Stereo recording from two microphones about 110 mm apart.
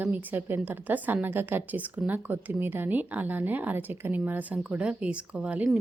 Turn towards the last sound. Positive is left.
turn(degrees=-10)  # may be behind; listen again after turning